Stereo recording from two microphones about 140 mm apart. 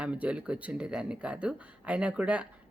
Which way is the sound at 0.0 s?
10° right (ahead or behind).